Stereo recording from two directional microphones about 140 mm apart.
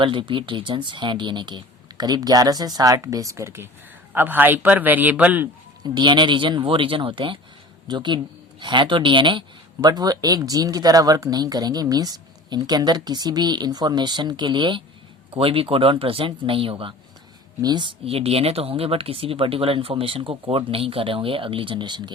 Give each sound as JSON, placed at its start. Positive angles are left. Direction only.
{"t": 0.0, "sound": "a man's voice", "side_deg": -35}
{"t": 5.8, "sound": "speech", "side_deg": -30}